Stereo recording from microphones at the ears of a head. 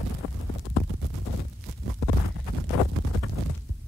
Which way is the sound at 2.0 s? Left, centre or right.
Left.